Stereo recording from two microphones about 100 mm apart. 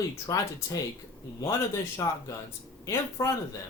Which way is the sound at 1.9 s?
30° left (ahead or behind).